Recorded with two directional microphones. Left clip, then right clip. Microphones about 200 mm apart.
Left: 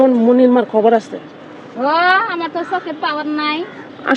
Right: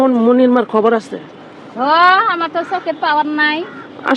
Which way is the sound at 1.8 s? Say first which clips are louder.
Right 3 dB; 55° right (ahead or behind).